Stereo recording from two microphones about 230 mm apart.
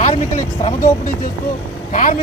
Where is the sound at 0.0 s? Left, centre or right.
Left.